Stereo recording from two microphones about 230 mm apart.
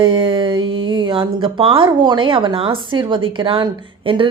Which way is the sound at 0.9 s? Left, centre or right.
Centre.